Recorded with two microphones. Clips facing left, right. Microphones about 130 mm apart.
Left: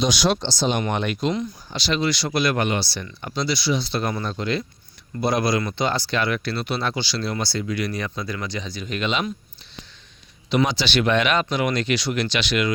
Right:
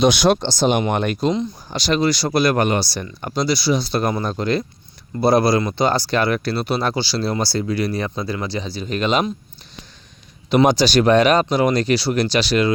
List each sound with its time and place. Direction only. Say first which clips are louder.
0.0 s speech: right 6 dB; 55° right (ahead or behind)
10.5 s speech: right 7 dB; 45° right (ahead or behind)